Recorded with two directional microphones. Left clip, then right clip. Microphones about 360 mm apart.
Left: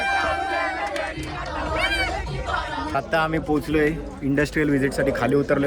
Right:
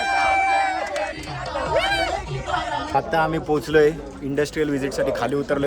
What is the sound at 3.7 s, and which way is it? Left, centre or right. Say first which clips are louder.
A man's voice: right 5 dB; centre.